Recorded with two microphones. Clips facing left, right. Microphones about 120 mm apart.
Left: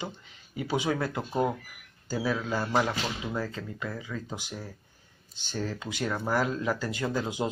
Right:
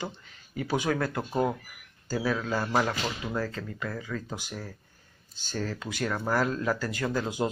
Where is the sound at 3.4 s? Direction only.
15° left (ahead or behind).